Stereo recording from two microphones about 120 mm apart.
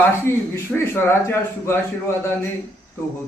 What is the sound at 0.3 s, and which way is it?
A man's voice, 20° left (ahead or behind).